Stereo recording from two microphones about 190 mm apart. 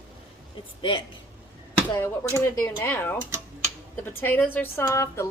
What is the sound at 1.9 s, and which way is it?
A woman's voice, 15° left (ahead or behind).